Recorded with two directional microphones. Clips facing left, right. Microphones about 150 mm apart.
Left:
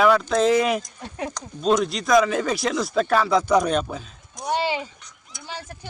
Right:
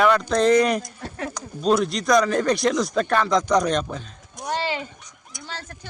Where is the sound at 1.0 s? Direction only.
15° left (ahead or behind).